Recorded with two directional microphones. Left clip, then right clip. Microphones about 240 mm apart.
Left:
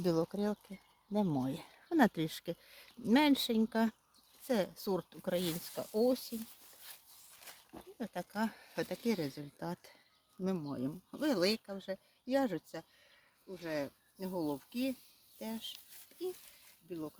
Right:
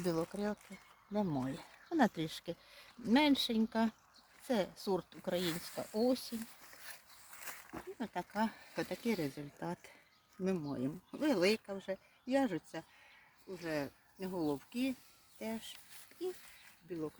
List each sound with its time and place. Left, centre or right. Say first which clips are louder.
0.0 s speech: left 3 dB; left
7.4 s a sound: right 6 dB; centre
7.9 s speech: right 1 dB; left